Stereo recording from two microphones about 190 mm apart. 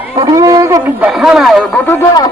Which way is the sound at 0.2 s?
20° right (ahead or behind).